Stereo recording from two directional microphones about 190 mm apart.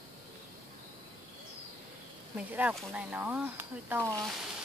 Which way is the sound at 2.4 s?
5° right (ahead or behind).